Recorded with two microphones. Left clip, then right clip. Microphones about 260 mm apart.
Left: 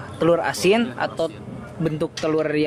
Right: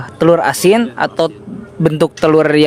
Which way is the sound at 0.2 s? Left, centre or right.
Right.